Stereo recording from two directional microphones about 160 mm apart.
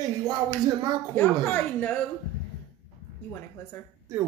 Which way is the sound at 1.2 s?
15° left (ahead or behind).